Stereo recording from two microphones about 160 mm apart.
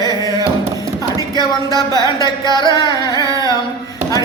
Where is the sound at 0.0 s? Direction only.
20° right (ahead or behind).